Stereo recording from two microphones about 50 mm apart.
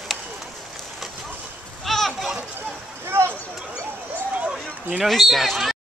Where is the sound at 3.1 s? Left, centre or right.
Right.